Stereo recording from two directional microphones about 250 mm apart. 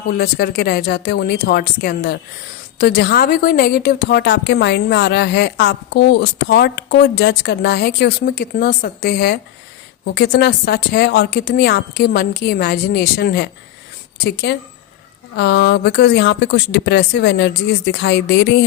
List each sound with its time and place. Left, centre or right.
0.2 s a woman's voice: left